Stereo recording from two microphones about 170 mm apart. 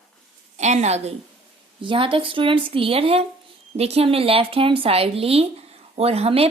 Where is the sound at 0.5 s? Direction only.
40° right (ahead or behind).